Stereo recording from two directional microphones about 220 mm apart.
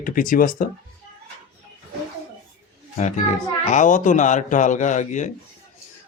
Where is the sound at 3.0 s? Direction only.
30° left (ahead or behind).